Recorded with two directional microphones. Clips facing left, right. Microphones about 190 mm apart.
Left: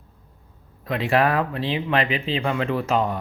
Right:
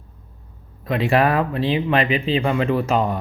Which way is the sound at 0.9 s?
15° right (ahead or behind).